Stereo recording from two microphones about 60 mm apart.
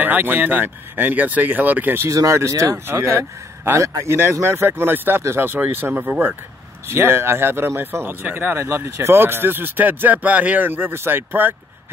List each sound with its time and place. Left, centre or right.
0.0 s speech: right
2.0 s speech: right
2.9 s speech: right
8.6 s speech: right